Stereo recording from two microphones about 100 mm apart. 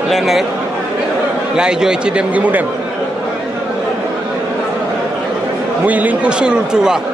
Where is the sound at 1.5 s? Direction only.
5° right (ahead or behind).